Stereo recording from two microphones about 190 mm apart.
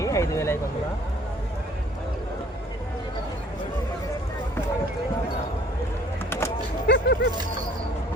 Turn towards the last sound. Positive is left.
turn(degrees=60)  # may be behind; listen again after turning